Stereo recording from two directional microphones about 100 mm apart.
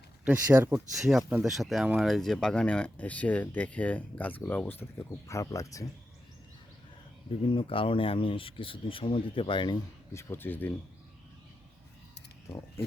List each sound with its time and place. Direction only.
0.5 s speech: 25° right (ahead or behind)
0.9 s speech: centre (ahead or behind); by 5.8 s 30° left (ahead or behind)
7.3 s speech: 65° left (ahead or behind)
10.2 s speech: 25° left (ahead or behind)